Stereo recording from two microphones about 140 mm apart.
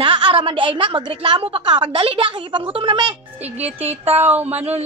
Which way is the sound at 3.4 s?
50° right (ahead or behind).